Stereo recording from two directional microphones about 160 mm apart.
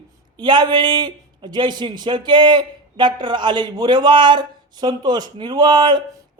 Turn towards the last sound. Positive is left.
turn(degrees=-30)  # may be behind; listen again after turning